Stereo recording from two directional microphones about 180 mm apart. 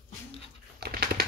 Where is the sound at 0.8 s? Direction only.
60° right (ahead or behind).